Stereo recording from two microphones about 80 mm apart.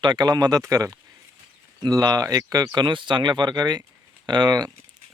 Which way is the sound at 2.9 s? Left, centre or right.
Right.